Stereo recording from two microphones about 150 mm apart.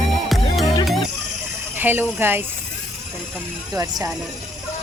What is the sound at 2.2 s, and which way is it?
Speech, 15° right (ahead or behind).